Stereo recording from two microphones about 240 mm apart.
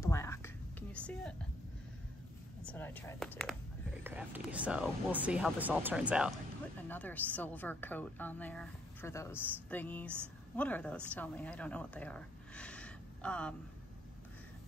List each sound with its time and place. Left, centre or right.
0.0 s a sound: centre
2.6 s a woman's voice: centre
4.0 s speech: centre
6.9 s a woman's voice: centre